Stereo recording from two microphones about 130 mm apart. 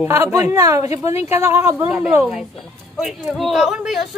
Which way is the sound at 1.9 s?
5° right (ahead or behind).